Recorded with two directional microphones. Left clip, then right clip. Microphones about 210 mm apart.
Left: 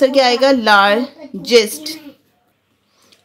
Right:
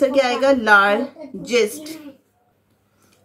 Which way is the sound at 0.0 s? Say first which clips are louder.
Left 5 dB; 40° left (ahead or behind).